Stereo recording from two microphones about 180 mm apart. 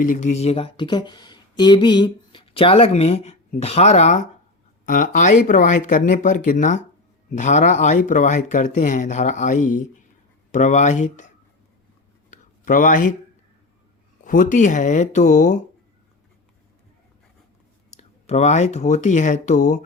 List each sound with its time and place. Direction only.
0.0 s speech: 45° left (ahead or behind)
12.3 s a sound: 50° left (ahead or behind)
14.3 s speech: 45° left (ahead or behind)
17.9 s speech: 40° left (ahead or behind)